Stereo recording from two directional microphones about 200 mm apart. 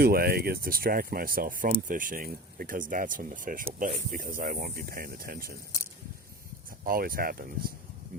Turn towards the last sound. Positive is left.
turn(degrees=-45)  # may be behind; listen again after turning